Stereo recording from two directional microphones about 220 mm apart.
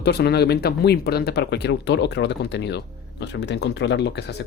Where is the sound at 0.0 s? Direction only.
50° left (ahead or behind).